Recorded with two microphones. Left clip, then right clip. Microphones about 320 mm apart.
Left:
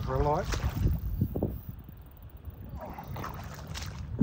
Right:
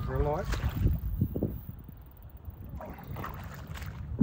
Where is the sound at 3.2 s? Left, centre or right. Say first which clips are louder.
Right 1 dB; centre.